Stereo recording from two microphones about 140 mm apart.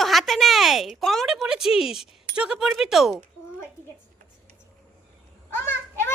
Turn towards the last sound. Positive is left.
turn(degrees=15)  # may be behind; listen again after turning